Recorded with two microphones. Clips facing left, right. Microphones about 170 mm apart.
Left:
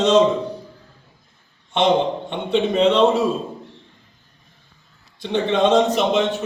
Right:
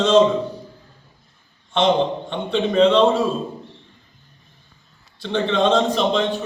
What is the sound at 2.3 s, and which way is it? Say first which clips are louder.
Speech: left 1 dB; 20° left (ahead or behind).